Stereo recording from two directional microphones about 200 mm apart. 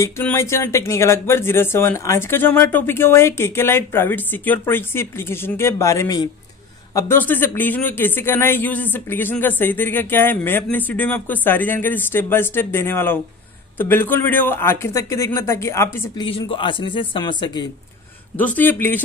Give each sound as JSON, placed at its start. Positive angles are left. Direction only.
{"t": 0.0, "sound": "speech", "side_deg": 10}
{"t": 16.3, "sound": "speech", "side_deg": 25}
{"t": 18.4, "sound": "speech", "side_deg": 10}